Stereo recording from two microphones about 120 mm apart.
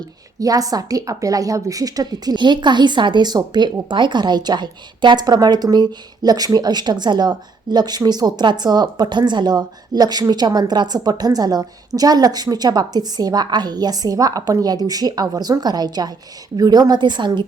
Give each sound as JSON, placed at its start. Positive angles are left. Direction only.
{"t": 0.3, "sound": "a woman's voice", "side_deg": -30}